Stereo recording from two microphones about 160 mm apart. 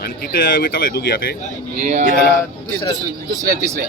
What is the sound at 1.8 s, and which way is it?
Speech, 50° right (ahead or behind).